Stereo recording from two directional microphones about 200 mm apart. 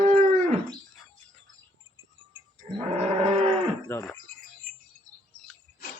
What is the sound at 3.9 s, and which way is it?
Bird, 10° left (ahead or behind).